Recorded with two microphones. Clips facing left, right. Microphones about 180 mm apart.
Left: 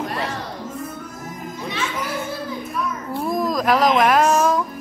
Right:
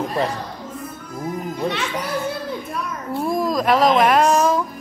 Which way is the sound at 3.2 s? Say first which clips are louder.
Right 1 dB; centre (ahead or behind).